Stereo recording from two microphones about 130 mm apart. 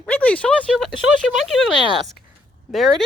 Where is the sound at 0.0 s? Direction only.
10° left (ahead or behind).